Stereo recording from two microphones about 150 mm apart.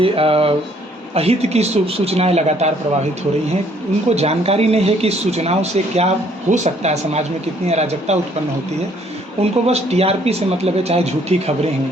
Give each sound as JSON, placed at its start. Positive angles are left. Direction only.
{"t": 0.0, "sound": "speech", "side_deg": -40}
{"t": 4.1, "sound": "speech", "side_deg": -45}
{"t": 9.4, "sound": "speech", "side_deg": -45}